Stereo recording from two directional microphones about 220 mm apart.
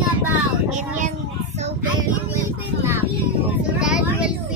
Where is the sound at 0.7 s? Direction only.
35° right (ahead or behind).